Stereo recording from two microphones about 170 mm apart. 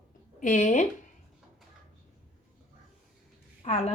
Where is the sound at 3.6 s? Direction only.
40° left (ahead or behind).